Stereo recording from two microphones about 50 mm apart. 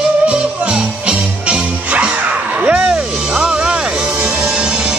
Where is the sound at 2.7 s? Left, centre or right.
Centre.